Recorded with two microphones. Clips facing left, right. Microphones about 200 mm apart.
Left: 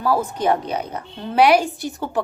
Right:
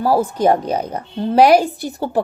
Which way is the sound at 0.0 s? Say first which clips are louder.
Right 5 dB; 35° right (ahead or behind).